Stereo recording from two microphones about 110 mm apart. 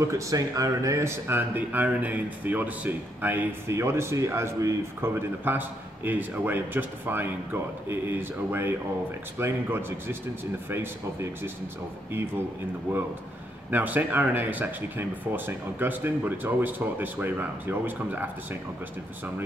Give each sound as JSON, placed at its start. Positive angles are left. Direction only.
{"t": 0.0, "sound": "speech", "side_deg": -30}
{"t": 13.7, "sound": "speech", "side_deg": -15}